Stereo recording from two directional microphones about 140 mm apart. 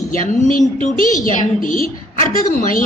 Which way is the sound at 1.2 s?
70° left (ahead or behind).